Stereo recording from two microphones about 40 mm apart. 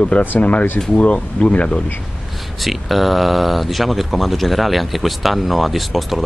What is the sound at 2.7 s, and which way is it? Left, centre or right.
Speech, centre.